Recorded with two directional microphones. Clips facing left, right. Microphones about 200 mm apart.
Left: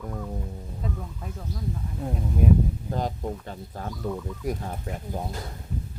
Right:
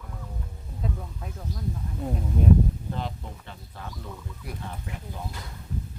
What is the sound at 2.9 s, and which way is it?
Speech, 40° left (ahead or behind).